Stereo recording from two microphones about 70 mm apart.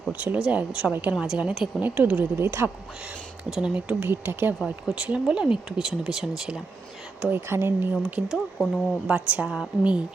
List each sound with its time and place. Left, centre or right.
0.1 s a woman's voice: right
0.3 s a woman's voice: centre
2.4 s speech: right
3.5 s speech: centre
4.0 s speech: right
4.6 s speech: centre
7.3 s speech: right
8.0 s speech: centre
8.5 s speech: centre
9.0 s a woman's voice: centre